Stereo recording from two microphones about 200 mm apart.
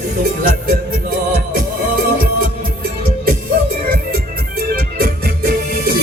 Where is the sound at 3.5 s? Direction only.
45° right (ahead or behind).